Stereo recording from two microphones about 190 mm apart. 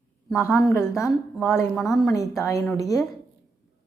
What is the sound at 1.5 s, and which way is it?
Speech, centre (ahead or behind).